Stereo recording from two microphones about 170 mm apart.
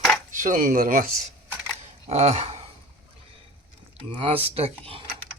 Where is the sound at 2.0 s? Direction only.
40° right (ahead or behind).